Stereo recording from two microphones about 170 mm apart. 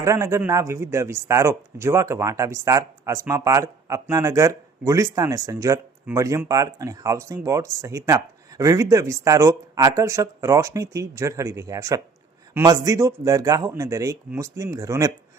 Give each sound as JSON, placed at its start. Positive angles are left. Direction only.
{"t": 0.0, "sound": "a man's voice", "side_deg": -15}